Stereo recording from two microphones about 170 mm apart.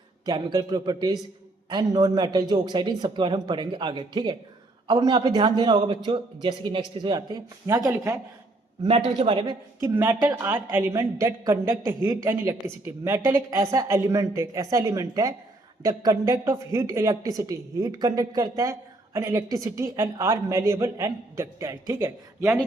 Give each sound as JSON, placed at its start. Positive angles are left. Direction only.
{"t": 0.3, "sound": "a man's voice", "side_deg": -25}
{"t": 8.8, "sound": "a man's voice", "side_deg": -35}
{"t": 9.8, "sound": "a woman's voice", "side_deg": -15}
{"t": 10.4, "sound": "a woman's voice", "side_deg": -10}